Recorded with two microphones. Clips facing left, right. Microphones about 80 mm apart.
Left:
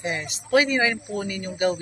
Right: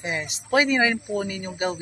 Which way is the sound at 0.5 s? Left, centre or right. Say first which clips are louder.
Even; right.